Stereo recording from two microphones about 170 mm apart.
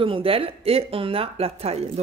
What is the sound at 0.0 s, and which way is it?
A woman's voice, 30° right (ahead or behind).